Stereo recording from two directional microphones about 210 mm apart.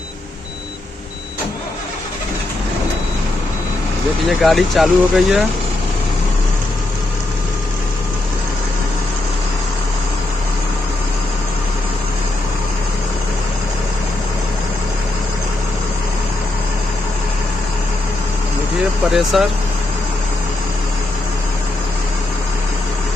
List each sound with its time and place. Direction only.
4.3 s speech: centre (ahead or behind)
19.3 s speech: centre (ahead or behind)